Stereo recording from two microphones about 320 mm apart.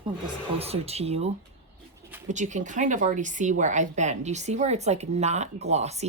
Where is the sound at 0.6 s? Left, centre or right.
Centre.